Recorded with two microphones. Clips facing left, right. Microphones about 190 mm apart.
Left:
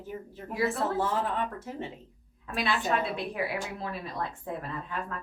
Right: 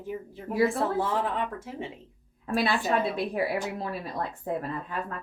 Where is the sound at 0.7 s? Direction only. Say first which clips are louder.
Right 2 dB; 15° right (ahead or behind).